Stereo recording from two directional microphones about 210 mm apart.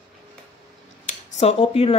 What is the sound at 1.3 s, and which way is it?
Speech, 30° left (ahead or behind).